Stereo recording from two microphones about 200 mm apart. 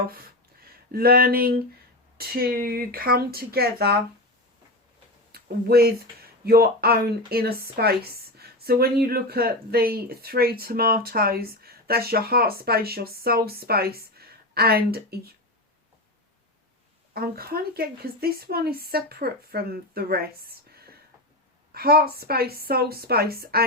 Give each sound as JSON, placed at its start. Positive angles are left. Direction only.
{"t": 0.9, "sound": "speech", "side_deg": -50}
{"t": 5.3, "sound": "speech", "side_deg": -50}
{"t": 17.2, "sound": "speech", "side_deg": -50}